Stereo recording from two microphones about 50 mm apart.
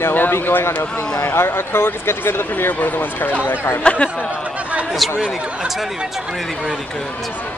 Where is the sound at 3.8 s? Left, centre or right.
Left.